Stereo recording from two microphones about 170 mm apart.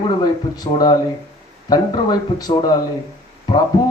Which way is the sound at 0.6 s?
25° left (ahead or behind).